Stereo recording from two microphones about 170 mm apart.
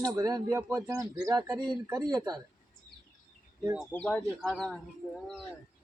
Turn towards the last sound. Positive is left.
turn(degrees=5)  # may be behind; listen again after turning